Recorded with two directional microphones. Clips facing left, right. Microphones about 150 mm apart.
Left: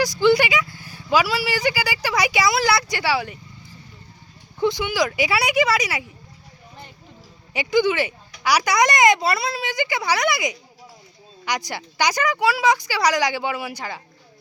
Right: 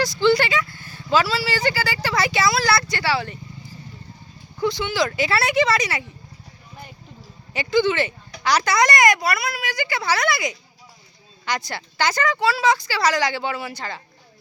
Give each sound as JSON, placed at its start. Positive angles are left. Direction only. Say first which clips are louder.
{"t": 0.0, "sound": "speech", "louder": "left 1 dB", "side_deg": 15}
{"t": 4.6, "sound": "speech", "louder": "left 1 dB", "side_deg": 15}
{"t": 7.5, "sound": "speech", "louder": "even", "side_deg": 15}